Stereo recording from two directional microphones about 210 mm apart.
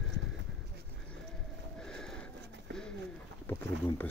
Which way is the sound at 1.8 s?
5° left (ahead or behind).